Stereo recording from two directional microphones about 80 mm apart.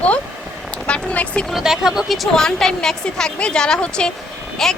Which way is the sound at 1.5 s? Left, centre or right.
Centre.